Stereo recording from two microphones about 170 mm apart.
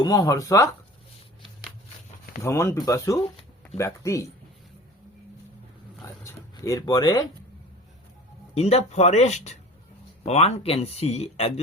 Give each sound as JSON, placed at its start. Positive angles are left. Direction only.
{"t": 0.0, "sound": "speech", "side_deg": 20}
{"t": 2.4, "sound": "speech", "side_deg": 15}
{"t": 6.2, "sound": "speech", "side_deg": 20}
{"t": 8.5, "sound": "speech", "side_deg": 40}